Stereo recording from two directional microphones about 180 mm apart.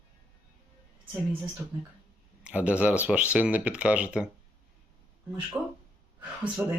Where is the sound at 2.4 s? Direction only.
10° right (ahead or behind).